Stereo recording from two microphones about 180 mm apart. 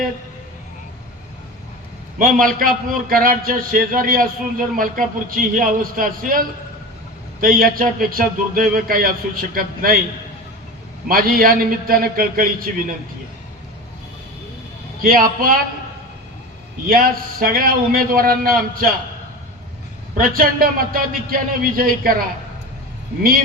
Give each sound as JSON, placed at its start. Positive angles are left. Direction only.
{"t": 2.1, "sound": "a man's voice", "side_deg": -50}
{"t": 7.4, "sound": "a man's voice", "side_deg": -50}
{"t": 11.1, "sound": "a man's voice", "side_deg": -55}
{"t": 15.0, "sound": "a man's voice", "side_deg": -55}
{"t": 16.9, "sound": "a man's voice", "side_deg": -55}
{"t": 20.1, "sound": "a man's voice", "side_deg": -55}